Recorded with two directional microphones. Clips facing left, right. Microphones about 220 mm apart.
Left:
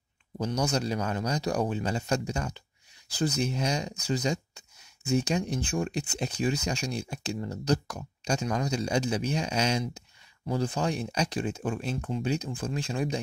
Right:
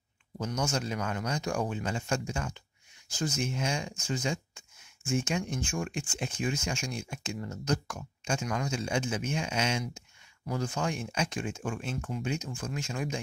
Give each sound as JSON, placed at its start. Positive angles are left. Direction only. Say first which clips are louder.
{"t": 0.4, "sound": "speech", "louder": "left 4 dB", "side_deg": 35}
{"t": 4.1, "sound": "a sound", "louder": "left 4 dB", "side_deg": 40}
{"t": 5.1, "sound": "speech", "louder": "left 4 dB", "side_deg": 35}